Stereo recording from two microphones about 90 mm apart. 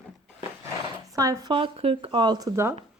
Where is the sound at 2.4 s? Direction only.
40° right (ahead or behind).